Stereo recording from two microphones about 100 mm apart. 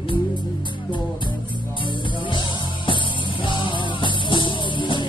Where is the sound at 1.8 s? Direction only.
55° left (ahead or behind).